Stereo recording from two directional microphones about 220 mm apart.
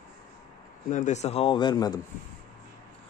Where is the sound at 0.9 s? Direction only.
35° left (ahead or behind); by 2.0 s 20° left (ahead or behind).